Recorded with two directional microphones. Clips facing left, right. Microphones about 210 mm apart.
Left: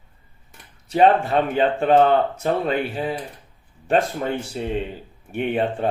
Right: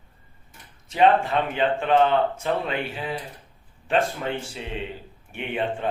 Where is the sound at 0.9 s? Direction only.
40° left (ahead or behind).